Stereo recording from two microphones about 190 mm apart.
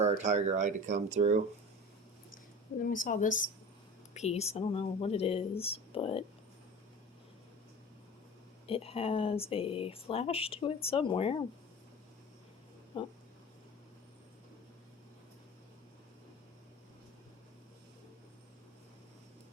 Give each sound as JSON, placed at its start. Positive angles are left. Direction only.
{"t": 0.2, "sound": "speech", "side_deg": -40}
{"t": 2.8, "sound": "speech", "side_deg": 45}
{"t": 8.6, "sound": "speech", "side_deg": 30}